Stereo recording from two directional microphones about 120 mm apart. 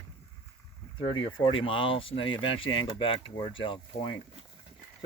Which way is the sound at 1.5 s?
45° left (ahead or behind).